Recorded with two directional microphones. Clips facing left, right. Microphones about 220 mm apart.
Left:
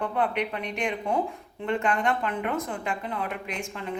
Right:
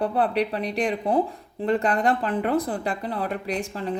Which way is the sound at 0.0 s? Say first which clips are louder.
Right 4 dB; 35° right (ahead or behind).